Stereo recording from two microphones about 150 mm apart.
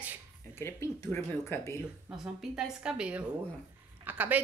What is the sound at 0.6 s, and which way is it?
Speech, 15° left (ahead or behind).